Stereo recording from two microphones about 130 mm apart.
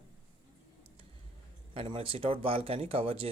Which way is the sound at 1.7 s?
45° right (ahead or behind).